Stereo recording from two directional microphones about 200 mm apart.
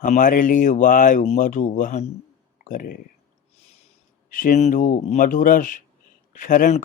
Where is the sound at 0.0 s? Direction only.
40° left (ahead or behind).